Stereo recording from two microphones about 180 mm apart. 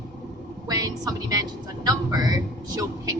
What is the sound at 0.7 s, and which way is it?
A woman's voice, 20° right (ahead or behind).